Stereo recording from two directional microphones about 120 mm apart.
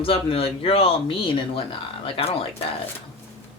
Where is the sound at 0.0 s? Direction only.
50° left (ahead or behind).